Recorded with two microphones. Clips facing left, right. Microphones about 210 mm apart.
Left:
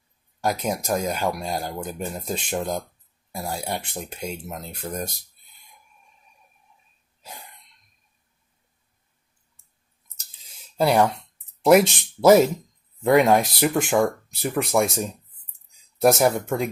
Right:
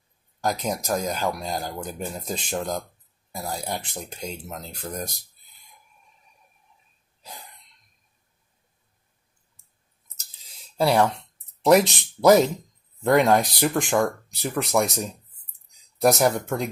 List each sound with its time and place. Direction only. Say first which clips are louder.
0.4 s speech: left 1 dB; 5° left (ahead or behind)
10.8 s speech: left 1 dB; 5° left (ahead or behind)